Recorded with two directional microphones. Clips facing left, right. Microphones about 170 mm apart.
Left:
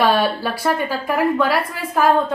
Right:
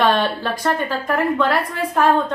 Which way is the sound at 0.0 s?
5° left (ahead or behind).